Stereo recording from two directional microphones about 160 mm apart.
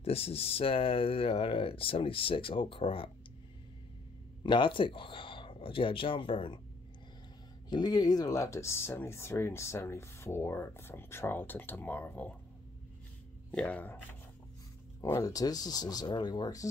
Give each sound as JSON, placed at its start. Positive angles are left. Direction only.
{"t": 0.0, "sound": "speech", "side_deg": 40}
{"t": 4.4, "sound": "speech", "side_deg": 30}
{"t": 7.7, "sound": "speech", "side_deg": 25}
{"t": 13.5, "sound": "speech", "side_deg": 10}
{"t": 15.0, "sound": "speech", "side_deg": 20}